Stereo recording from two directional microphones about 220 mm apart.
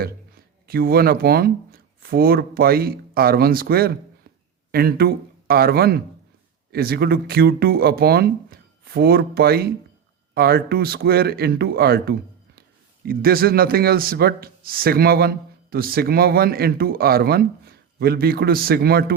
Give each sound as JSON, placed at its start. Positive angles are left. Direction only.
{"t": 0.7, "sound": "a man's voice", "side_deg": -45}